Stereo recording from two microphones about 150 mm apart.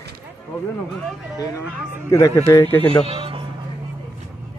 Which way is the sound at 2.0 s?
20° left (ahead or behind).